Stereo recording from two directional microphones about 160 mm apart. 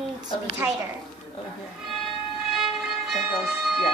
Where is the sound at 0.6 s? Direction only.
15° right (ahead or behind).